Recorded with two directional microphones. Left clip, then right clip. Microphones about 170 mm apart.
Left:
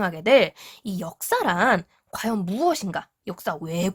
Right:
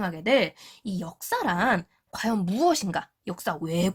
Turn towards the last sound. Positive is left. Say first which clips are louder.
# left 1 dB
turn(degrees=15)  # may be behind; listen again after turning